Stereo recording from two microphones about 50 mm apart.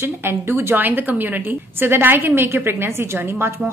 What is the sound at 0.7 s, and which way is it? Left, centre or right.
A woman's voice, right.